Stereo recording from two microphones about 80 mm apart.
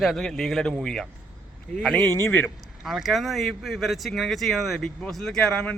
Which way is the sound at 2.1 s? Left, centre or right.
Left.